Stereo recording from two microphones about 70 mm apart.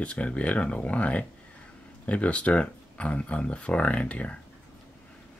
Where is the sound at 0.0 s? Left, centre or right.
Centre.